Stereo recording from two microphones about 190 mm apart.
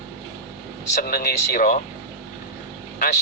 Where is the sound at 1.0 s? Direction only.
55° left (ahead or behind).